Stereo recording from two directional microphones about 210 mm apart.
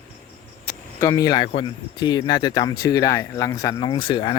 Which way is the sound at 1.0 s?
15° left (ahead or behind).